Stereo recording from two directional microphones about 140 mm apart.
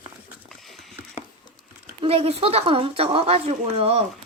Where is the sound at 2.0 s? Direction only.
45° right (ahead or behind).